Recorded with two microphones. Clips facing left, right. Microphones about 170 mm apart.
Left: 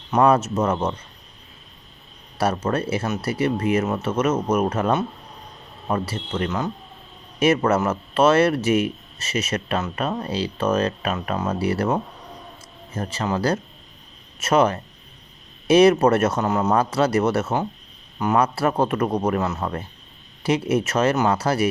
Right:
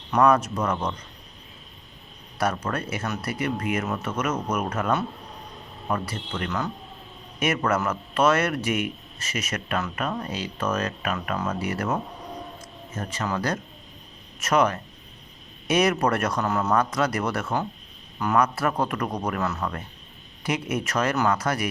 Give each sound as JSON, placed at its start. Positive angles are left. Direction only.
{"t": 0.1, "sound": "speech", "side_deg": 25}
{"t": 2.4, "sound": "speech", "side_deg": 30}